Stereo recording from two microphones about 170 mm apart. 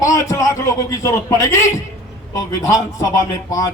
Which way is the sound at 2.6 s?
20° left (ahead or behind).